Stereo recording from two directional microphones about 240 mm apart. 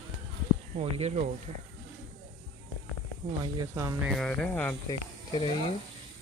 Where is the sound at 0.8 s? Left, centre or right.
Right.